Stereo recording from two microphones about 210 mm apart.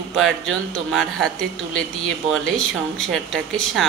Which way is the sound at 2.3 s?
5° left (ahead or behind).